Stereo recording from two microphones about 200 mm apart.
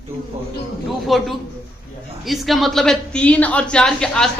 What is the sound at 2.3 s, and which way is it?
A woman's voice, centre (ahead or behind).